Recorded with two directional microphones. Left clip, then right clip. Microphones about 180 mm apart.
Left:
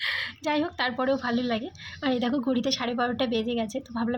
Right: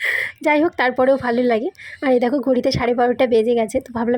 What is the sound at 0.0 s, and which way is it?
A woman's voice, 35° right (ahead or behind).